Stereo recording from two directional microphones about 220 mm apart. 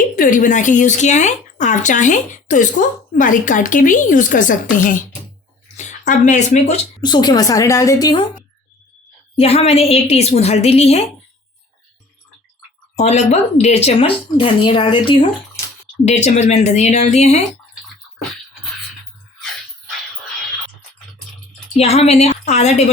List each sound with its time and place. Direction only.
0.2 s speech: 35° left (ahead or behind)
7.0 s a woman's voice: 20° left (ahead or behind)
9.3 s speech: 25° left (ahead or behind)
13.0 s speech: 30° left (ahead or behind)
21.8 s speech: 30° left (ahead or behind)